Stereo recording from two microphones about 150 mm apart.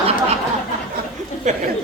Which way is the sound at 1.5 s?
50° right (ahead or behind).